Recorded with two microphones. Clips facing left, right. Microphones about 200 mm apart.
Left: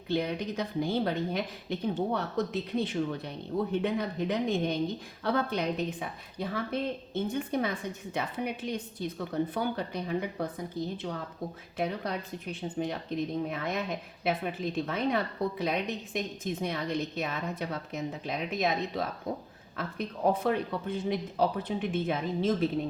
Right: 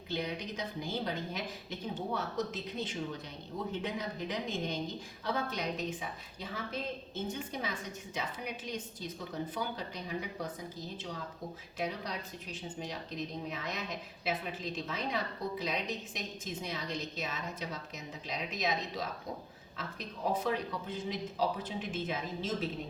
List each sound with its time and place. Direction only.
0.1 s a woman's voice: 55° left (ahead or behind)